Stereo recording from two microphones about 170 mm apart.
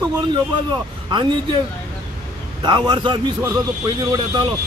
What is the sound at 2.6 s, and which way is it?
Speech, 25° right (ahead or behind).